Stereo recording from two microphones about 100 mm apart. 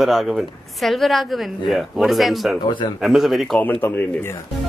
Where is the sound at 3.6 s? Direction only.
15° left (ahead or behind).